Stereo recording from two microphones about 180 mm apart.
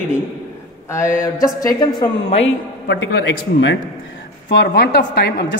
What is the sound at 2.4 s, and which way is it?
A woman's voice, 80° left.